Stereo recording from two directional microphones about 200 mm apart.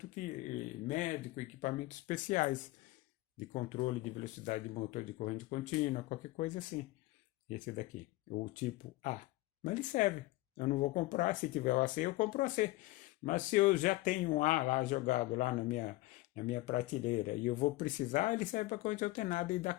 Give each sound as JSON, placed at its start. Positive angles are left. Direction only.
{"t": 0.2, "sound": "speech", "side_deg": 40}
{"t": 9.6, "sound": "speech", "side_deg": 40}